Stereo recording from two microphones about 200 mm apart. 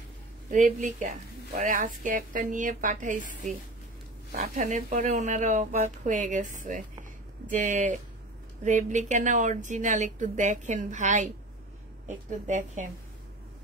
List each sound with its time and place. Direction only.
0.5 s a woman's voice: 40° right (ahead or behind)
4.4 s a woman's voice: 40° right (ahead or behind)
12.3 s a woman's voice: 35° right (ahead or behind)